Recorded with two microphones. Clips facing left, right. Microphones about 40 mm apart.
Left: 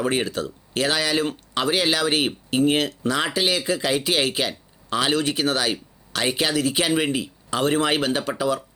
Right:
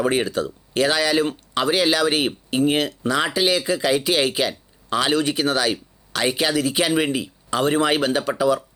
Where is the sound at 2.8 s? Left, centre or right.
Right.